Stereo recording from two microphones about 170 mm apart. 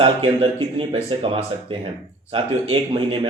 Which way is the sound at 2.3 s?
30° right (ahead or behind).